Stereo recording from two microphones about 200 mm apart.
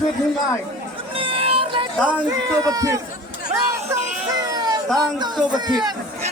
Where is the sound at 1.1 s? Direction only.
30° right (ahead or behind).